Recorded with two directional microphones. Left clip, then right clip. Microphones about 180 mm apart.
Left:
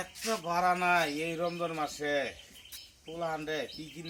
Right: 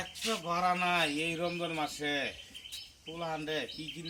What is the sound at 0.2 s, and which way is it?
Speech, 20° right (ahead or behind).